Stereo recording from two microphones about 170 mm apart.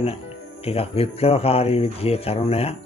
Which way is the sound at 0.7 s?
35° left (ahead or behind).